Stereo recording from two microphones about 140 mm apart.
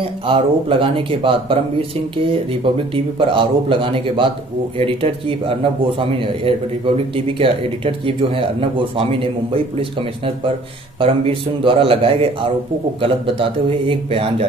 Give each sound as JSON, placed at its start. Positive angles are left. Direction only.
{"t": 0.0, "sound": "a man's voice", "side_deg": -40}